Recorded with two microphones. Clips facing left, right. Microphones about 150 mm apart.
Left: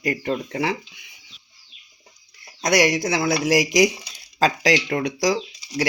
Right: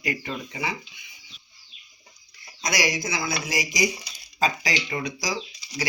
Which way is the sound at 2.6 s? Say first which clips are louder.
Left 8 dB; 65° left (ahead or behind).